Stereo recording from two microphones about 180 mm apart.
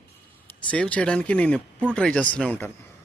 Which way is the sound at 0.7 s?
5° left (ahead or behind).